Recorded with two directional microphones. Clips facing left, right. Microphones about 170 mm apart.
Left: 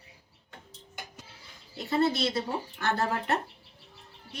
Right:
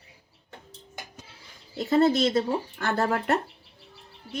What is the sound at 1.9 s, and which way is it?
Speech, 45° right (ahead or behind).